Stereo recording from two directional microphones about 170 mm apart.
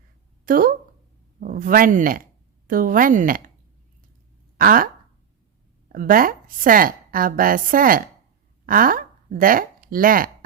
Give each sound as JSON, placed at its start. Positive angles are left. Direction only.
{"t": 0.4, "sound": "a woman's voice", "side_deg": -55}
{"t": 4.5, "sound": "a sound", "side_deg": -55}
{"t": 5.9, "sound": "a woman's voice", "side_deg": -55}